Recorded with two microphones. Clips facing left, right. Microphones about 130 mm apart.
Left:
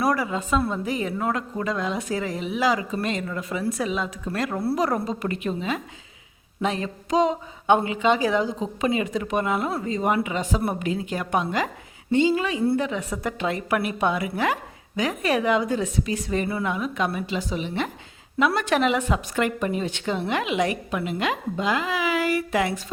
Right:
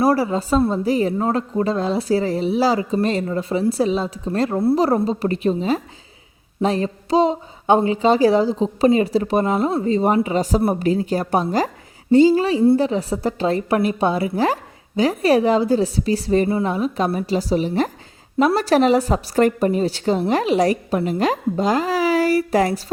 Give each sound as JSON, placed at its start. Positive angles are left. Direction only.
{"t": 0.0, "sound": "a woman's voice", "side_deg": -30}